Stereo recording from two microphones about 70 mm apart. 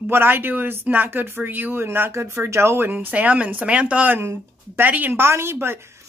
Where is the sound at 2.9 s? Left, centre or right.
Right.